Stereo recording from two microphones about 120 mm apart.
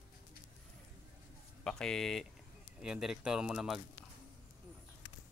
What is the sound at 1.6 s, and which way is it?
Speech, 5° left (ahead or behind).